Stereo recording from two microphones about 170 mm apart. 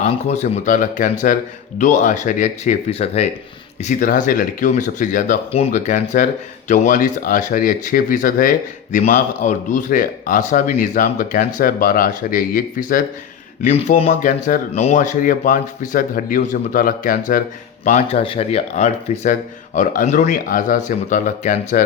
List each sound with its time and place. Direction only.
0.0 s speech: 40° left (ahead or behind)
2.9 s speech: 35° left (ahead or behind)
3.8 s speech: 50° left (ahead or behind)
13.6 s speech: 45° left (ahead or behind)
18.2 s speech: 35° left (ahead or behind)